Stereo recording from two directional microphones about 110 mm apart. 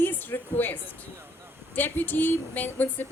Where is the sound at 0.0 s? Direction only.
15° left (ahead or behind).